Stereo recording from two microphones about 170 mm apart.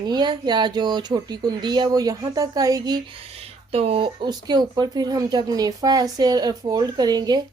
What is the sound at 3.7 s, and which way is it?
Speech, 35° right (ahead or behind).